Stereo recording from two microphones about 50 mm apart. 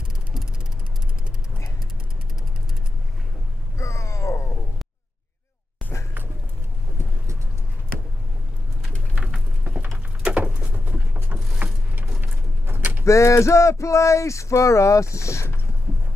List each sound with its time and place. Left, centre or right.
3.7 s a sound: left
9.1 s pigeon: centre
10.3 s a sound: right
11.3 s vehicle: centre
11.6 s vehicle: right
12.6 s door: right
13.0 s speech: left